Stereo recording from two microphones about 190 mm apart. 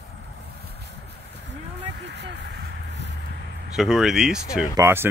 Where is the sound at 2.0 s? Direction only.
65° right (ahead or behind).